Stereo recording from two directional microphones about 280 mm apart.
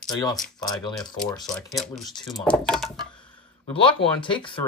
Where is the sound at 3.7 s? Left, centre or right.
Centre.